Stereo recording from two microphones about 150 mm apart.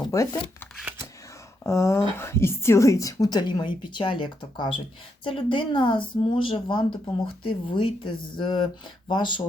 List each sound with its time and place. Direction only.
0.0 s shuffling cards: 20° left (ahead or behind)
1.6 s speech: 20° left (ahead or behind)